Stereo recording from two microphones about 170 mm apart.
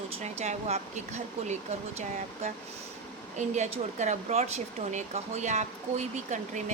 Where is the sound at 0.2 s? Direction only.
40° right (ahead or behind).